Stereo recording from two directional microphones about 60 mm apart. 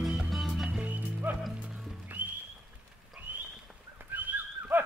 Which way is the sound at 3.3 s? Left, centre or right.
Right.